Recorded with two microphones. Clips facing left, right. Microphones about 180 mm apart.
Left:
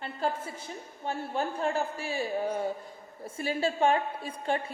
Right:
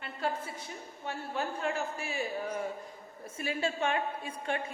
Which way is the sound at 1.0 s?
30° left (ahead or behind).